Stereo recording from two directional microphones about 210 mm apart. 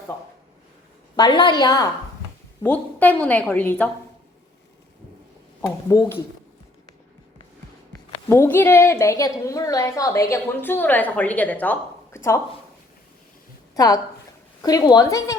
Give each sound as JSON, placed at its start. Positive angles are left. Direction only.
{"t": 1.1, "sound": "a woman's voice", "side_deg": 20}
{"t": 5.6, "sound": "a woman's voice", "side_deg": 15}
{"t": 8.3, "sound": "a woman's voice", "side_deg": 10}
{"t": 13.7, "sound": "a woman's voice", "side_deg": 15}